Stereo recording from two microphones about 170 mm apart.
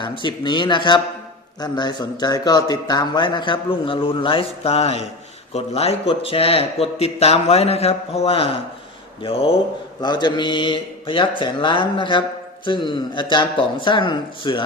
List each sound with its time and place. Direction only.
0.0 s a man's voice: 30° left (ahead or behind)